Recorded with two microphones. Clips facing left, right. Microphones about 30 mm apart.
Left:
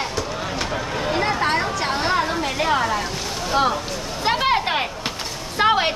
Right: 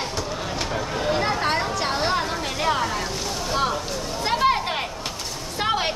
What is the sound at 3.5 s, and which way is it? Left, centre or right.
Speech, centre.